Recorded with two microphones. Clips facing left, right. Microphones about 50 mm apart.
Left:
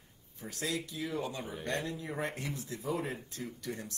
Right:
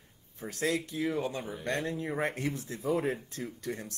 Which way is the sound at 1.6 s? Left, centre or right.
Right.